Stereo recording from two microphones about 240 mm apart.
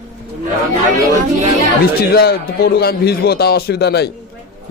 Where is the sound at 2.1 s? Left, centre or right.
Left.